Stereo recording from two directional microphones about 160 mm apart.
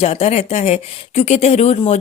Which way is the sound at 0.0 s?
40° left (ahead or behind).